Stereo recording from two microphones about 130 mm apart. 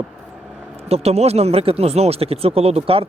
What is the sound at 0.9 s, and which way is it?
Speech, 50° right (ahead or behind).